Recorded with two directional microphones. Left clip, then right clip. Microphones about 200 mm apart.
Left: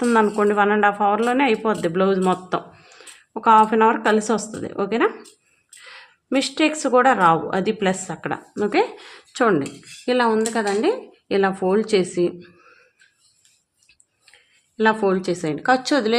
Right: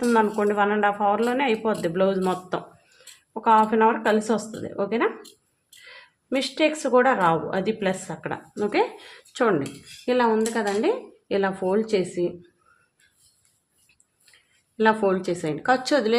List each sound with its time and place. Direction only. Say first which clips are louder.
0.0 s speech: left 3 dB; 30° left (ahead or behind)
14.8 s speech: left 2 dB; 15° left (ahead or behind)